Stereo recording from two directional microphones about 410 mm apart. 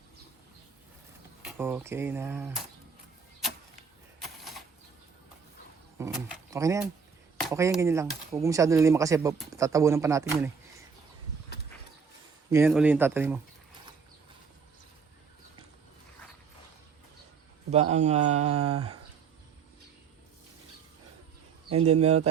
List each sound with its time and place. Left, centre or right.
1.5 s speech: centre
4.2 s a sound: centre
6.0 s a sound: centre
6.5 s speech: centre
12.5 s speech: centre
17.9 s speech: centre
21.7 s speech: centre